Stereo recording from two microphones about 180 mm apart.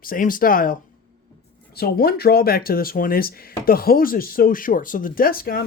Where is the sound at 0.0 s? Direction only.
50° left (ahead or behind).